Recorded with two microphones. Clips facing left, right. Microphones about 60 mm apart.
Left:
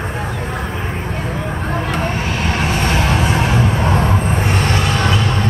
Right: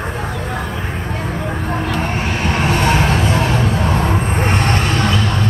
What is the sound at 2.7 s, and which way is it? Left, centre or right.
Music, centre.